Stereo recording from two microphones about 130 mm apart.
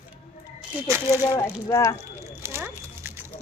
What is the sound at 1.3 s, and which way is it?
Speech, 20° left (ahead or behind).